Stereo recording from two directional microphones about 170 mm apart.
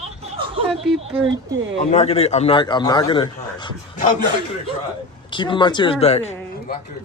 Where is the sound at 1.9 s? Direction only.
40° left (ahead or behind).